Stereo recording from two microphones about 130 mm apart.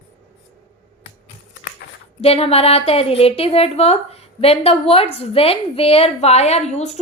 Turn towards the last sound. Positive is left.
turn(degrees=55)  # may be behind; listen again after turning